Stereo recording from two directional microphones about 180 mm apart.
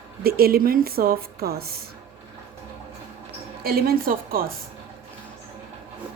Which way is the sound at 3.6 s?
55° right (ahead or behind).